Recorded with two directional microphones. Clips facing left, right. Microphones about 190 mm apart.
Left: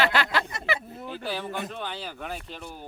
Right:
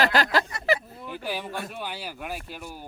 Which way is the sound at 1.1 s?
15° right (ahead or behind).